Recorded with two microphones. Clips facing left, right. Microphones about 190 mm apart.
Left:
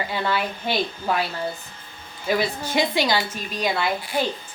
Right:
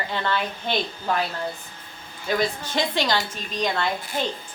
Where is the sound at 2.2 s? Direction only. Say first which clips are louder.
Left 1 dB; 10° left (ahead or behind).